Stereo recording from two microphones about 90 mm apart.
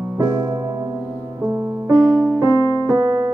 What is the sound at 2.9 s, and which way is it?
Music, 25° right (ahead or behind).